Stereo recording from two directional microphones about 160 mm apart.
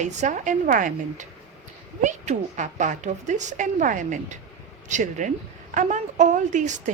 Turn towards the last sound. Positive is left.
turn(degrees=-50)  # may be behind; listen again after turning